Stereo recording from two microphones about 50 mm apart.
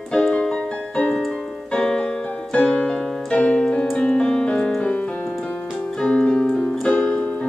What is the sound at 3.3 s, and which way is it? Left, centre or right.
Piano, centre.